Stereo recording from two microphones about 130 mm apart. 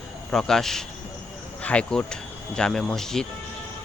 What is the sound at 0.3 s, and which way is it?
Speech, 5° left (ahead or behind).